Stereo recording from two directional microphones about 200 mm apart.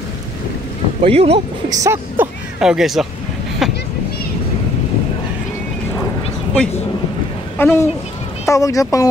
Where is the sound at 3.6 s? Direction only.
Centre (ahead or behind).